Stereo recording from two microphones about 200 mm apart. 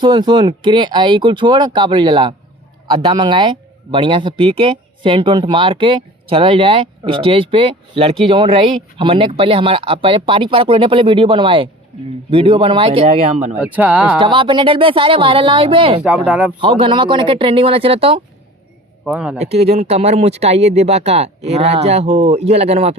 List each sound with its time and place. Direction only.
0.0 s speech: 20° right (ahead or behind)
13.6 s speech: 5° right (ahead or behind)
14.2 s speech: 25° right (ahead or behind)
16.0 s speech: 5° right (ahead or behind)
16.6 s speech: 25° right (ahead or behind)
19.0 s speech: 5° right (ahead or behind)
19.4 s speech: 30° right (ahead or behind)